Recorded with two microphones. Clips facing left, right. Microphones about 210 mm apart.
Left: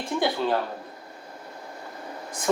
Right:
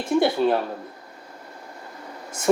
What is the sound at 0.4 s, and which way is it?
Speech, 15° right (ahead or behind).